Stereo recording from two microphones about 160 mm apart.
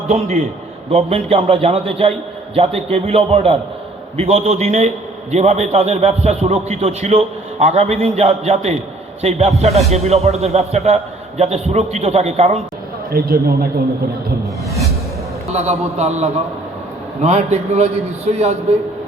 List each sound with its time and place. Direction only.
0.1 s a man's voice: 40° right (ahead or behind)
13.1 s speech: 70° right (ahead or behind)
15.5 s a man's voice: 45° right (ahead or behind)